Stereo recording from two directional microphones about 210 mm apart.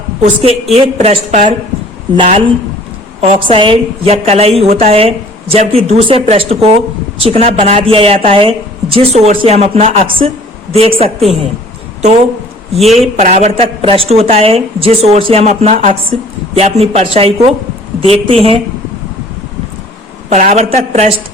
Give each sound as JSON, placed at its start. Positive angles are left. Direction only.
{"t": 0.2, "sound": "a woman's voice", "side_deg": -30}
{"t": 12.7, "sound": "a man's voice", "side_deg": 0}
{"t": 13.1, "sound": "a woman's voice", "side_deg": -35}
{"t": 20.3, "sound": "a woman's voice", "side_deg": -35}